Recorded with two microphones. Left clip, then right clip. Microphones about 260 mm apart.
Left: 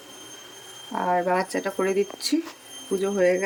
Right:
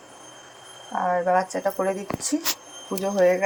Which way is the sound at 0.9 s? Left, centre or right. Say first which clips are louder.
Right 1 dB; centre.